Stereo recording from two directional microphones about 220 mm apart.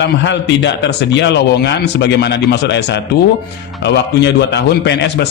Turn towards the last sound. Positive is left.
turn(degrees=50)  # may be behind; listen again after turning